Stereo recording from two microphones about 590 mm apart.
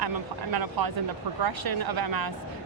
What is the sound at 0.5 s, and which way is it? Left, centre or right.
Speech, right.